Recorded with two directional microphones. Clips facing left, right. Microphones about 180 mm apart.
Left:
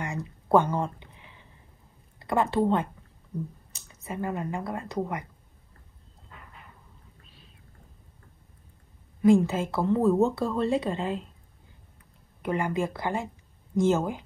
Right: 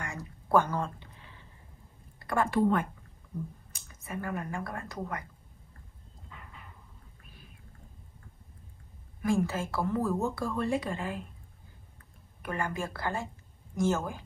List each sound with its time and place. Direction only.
0.0 s a sound: 25° left (ahead or behind)
2.1 s a woman's voice: 20° left (ahead or behind)
9.2 s speech: 20° left (ahead or behind)
12.4 s speech: 20° left (ahead or behind)